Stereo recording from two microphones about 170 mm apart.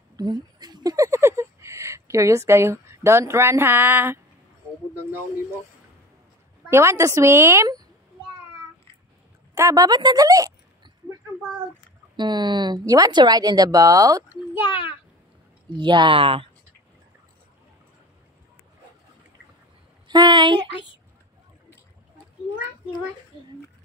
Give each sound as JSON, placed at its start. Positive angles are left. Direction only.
{"t": 0.1, "sound": "a sound", "side_deg": -25}
{"t": 6.7, "sound": "a woman's voice", "side_deg": -15}
{"t": 9.6, "sound": "speech", "side_deg": -20}
{"t": 12.2, "sound": "speech", "side_deg": -25}
{"t": 14.7, "sound": "a child's voice", "side_deg": 30}
{"t": 15.7, "sound": "speech", "side_deg": -25}
{"t": 20.1, "sound": "speech", "side_deg": -25}